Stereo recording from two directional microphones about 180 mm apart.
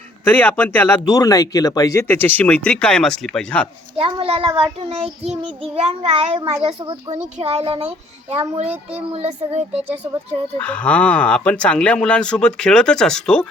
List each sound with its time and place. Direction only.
0.3 s speech: 10° left (ahead or behind)
3.9 s child singing: 30° right (ahead or behind)
7.3 s child singing: 35° right (ahead or behind)
10.6 s speech: 5° left (ahead or behind)